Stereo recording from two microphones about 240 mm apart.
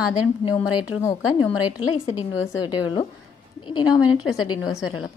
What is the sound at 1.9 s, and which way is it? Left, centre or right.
Speech, left.